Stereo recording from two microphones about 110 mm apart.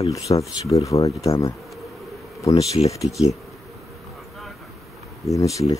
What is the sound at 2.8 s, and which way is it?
Speech, 30° left (ahead or behind).